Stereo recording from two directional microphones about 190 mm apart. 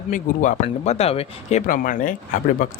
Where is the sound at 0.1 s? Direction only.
40° left (ahead or behind).